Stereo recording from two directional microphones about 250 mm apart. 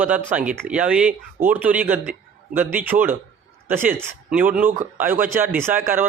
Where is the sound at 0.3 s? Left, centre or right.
Centre.